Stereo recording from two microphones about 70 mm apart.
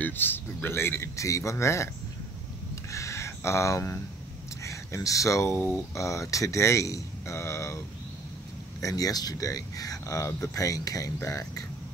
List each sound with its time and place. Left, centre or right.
0.0 s speech: left
1.1 s speech: left
2.7 s a sound: left
4.6 s speech: left
8.8 s speech: left